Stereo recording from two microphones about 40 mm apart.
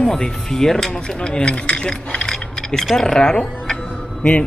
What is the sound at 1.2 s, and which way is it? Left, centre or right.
Speech, left.